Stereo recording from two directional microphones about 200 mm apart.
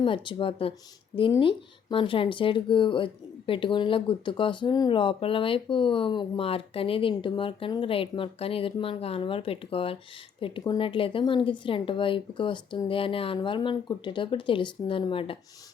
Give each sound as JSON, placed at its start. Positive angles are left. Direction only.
{"t": 0.0, "sound": "speech", "side_deg": 25}